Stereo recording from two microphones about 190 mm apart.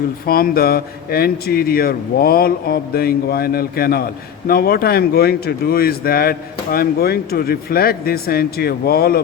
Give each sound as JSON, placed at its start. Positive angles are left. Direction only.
{"t": 0.3, "sound": "speech", "side_deg": 50}